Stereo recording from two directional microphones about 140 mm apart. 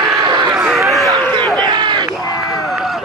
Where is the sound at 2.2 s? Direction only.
30° left (ahead or behind).